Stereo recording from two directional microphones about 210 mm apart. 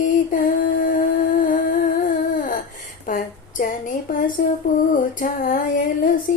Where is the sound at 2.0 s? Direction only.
40° left (ahead or behind).